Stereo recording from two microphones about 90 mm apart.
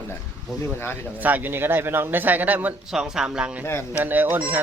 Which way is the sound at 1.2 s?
20° right (ahead or behind).